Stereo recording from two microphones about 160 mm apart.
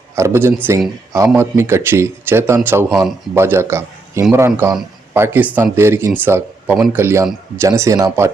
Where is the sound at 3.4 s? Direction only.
15° right (ahead or behind).